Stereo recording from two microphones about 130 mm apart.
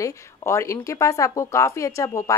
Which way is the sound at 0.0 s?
25° left (ahead or behind).